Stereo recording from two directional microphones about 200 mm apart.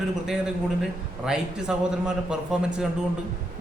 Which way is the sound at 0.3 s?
Centre (ahead or behind).